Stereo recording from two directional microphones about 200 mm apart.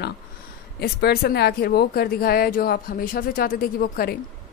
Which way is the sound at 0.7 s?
50° left (ahead or behind).